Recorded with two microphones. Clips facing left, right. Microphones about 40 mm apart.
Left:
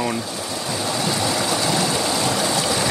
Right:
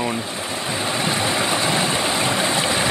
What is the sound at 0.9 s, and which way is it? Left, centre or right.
Stream, right.